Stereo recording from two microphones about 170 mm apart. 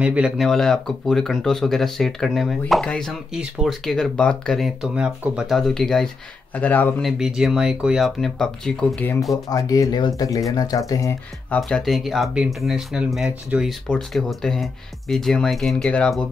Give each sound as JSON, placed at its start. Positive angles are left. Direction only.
{"t": 0.0, "sound": "speech", "side_deg": -5}
{"t": 7.1, "sound": "speech", "side_deg": -5}
{"t": 9.5, "sound": "speech", "side_deg": 20}
{"t": 11.5, "sound": "speech", "side_deg": 5}